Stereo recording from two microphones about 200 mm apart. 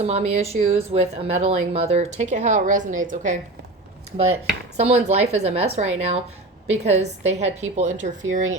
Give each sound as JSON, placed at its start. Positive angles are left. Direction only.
{"t": 0.0, "sound": "speech", "side_deg": -30}
{"t": 5.0, "sound": "speech", "side_deg": -35}